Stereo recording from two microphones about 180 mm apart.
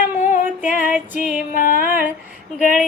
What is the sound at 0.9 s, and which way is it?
Music, 10° right (ahead or behind).